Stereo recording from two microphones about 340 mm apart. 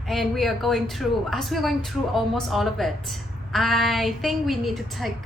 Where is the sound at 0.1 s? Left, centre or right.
Centre.